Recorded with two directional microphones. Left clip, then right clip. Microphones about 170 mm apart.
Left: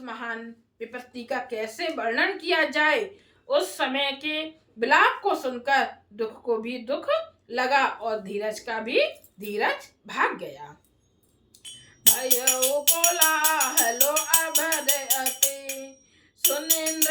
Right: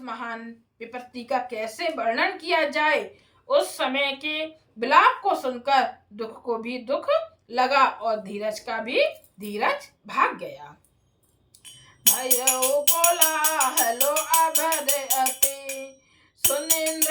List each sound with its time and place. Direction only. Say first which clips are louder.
0.0 s a woman's voice: right 1 dB; 15° right (ahead or behind)
11.6 s music: right 1 dB; 5° right (ahead or behind)